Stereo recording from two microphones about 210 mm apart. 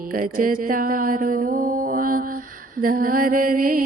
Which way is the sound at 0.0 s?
40° right (ahead or behind).